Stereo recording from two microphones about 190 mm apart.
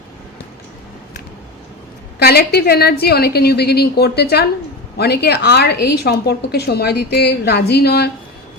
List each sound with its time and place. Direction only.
2.1 s a woman's voice: 55° left (ahead or behind)